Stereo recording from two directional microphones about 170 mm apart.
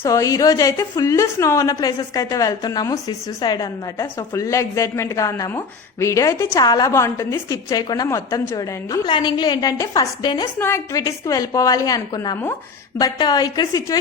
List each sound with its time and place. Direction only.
0.0 s a woman's voice: 20° left (ahead or behind)